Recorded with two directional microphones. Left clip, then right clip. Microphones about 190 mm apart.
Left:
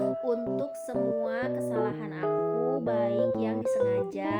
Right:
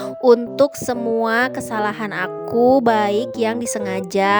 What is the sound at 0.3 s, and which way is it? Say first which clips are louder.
Speech: right 16 dB; 55° right (ahead or behind).